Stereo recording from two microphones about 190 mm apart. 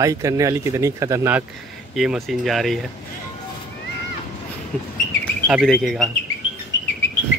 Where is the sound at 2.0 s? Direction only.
Centre (ahead or behind).